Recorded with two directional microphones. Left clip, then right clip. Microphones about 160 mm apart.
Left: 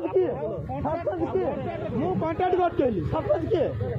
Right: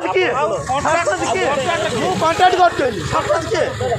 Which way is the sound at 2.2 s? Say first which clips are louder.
Right 12 dB; 25° left (ahead or behind).